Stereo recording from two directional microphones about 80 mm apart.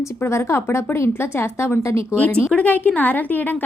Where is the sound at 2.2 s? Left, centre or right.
Centre.